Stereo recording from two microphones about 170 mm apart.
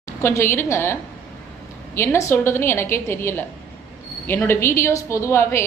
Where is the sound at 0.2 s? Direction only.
15° left (ahead or behind).